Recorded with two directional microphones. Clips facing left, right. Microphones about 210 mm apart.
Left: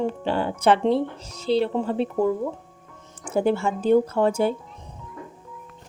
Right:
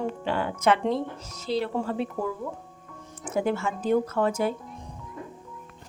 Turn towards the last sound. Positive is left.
turn(degrees=30)  # may be behind; listen again after turning